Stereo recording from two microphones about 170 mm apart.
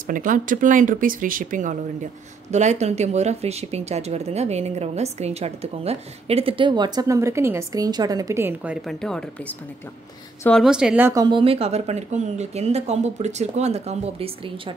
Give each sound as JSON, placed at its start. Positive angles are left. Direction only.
{"t": 0.0, "sound": "speech", "side_deg": -50}
{"t": 8.8, "sound": "speech", "side_deg": 5}
{"t": 10.6, "sound": "speech", "side_deg": -5}
{"t": 11.2, "sound": "speech", "side_deg": -30}